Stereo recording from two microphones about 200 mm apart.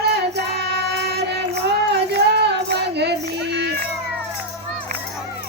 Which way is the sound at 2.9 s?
55° right (ahead or behind).